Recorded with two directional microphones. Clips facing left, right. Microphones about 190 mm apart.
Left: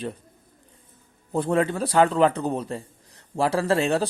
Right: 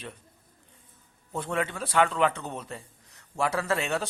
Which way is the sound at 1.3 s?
35° left (ahead or behind).